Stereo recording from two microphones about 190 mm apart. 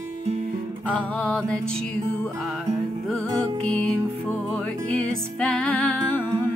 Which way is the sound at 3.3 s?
20° right (ahead or behind).